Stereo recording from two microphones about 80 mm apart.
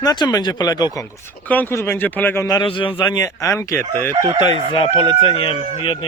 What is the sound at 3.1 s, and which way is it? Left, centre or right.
Speech, left.